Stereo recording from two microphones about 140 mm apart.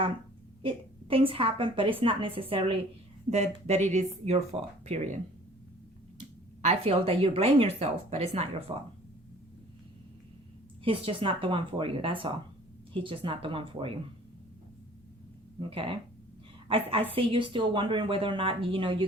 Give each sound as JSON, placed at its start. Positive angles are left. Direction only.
{"t": 1.1, "sound": "a woman's voice", "side_deg": -40}
{"t": 3.2, "sound": "speech", "side_deg": -50}
{"t": 6.1, "sound": "speech", "side_deg": -55}
{"t": 10.8, "sound": "a woman's voice", "side_deg": -40}
{"t": 16.6, "sound": "a woman's voice", "side_deg": -40}